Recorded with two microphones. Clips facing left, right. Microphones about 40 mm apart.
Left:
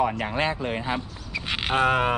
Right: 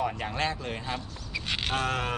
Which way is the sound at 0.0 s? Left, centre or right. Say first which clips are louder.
Left 5 dB; centre.